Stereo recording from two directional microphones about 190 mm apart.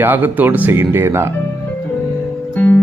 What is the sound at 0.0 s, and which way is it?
A man's voice, 10° right (ahead or behind).